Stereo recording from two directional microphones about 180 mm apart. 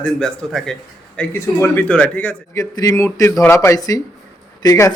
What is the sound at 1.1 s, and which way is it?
A man's voice, 15° left (ahead or behind).